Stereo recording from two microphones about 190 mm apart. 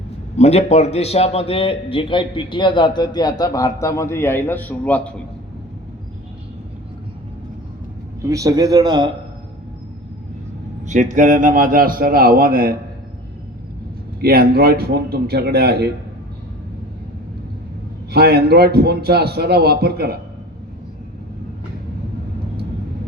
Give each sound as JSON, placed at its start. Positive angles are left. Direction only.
{"t": 0.3, "sound": "a man's voice", "side_deg": 35}
{"t": 8.3, "sound": "a man's voice", "side_deg": -20}
{"t": 10.8, "sound": "a man's voice", "side_deg": -40}
{"t": 14.2, "sound": "a man's voice", "side_deg": -55}
{"t": 18.1, "sound": "a man's voice", "side_deg": -55}